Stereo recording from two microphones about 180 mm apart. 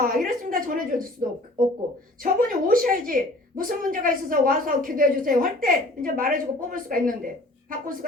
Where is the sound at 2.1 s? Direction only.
50° right (ahead or behind).